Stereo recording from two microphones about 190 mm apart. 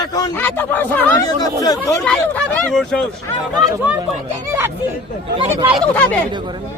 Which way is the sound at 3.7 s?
10° right (ahead or behind).